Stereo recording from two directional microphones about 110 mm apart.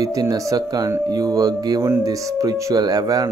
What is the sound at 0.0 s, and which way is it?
Speech, 35° right (ahead or behind).